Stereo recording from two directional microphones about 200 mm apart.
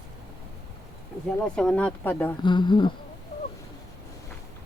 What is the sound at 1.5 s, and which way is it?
Speech, 5° left (ahead or behind).